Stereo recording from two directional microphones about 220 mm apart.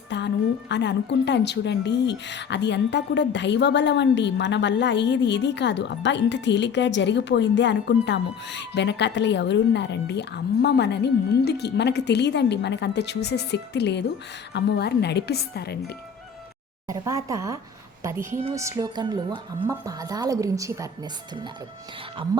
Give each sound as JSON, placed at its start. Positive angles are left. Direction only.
{"t": 0.1, "sound": "a woman's voice", "side_deg": 50}
{"t": 16.9, "sound": "a woman's voice", "side_deg": -15}